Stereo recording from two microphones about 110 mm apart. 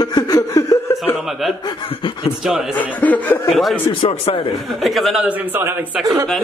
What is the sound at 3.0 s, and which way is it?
Speech, 15° left (ahead or behind).